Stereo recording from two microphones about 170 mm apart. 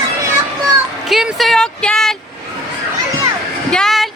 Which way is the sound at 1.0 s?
Centre (ahead or behind).